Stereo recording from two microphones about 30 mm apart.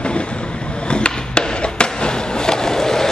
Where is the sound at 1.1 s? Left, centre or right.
Left.